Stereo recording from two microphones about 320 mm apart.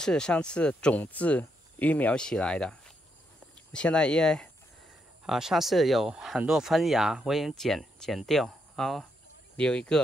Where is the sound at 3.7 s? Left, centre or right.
Centre.